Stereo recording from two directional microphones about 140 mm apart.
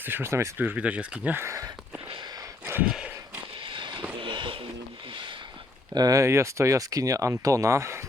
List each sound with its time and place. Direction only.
0.0 s speech: 15° right (ahead or behind)
2.6 s a sound: 15° right (ahead or behind)
2.9 s horse: 5° right (ahead or behind)
3.7 s vehicle: 35° right (ahead or behind)
4.2 s a sound: 35° right (ahead or behind)
5.9 s speech: 25° right (ahead or behind)